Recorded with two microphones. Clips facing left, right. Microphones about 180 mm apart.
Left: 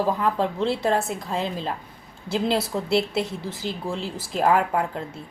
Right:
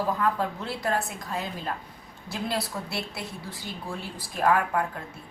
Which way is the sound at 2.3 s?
25° left (ahead or behind).